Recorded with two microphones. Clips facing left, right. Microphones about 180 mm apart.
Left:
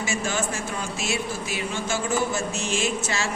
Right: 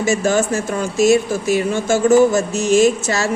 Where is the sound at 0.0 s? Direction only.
40° right (ahead or behind).